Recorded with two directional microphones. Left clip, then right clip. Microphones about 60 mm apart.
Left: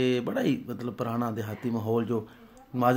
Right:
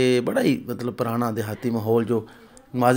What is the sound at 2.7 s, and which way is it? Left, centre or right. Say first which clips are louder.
Speech: right 5 dB; centre.